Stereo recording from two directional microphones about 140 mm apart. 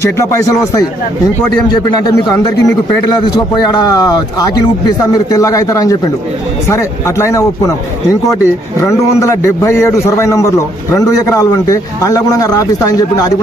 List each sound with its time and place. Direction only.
0.0 s a man's voice: 20° left (ahead or behind)